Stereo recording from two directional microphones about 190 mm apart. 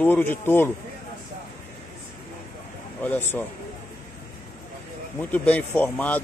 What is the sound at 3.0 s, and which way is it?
Speech, 10° left (ahead or behind).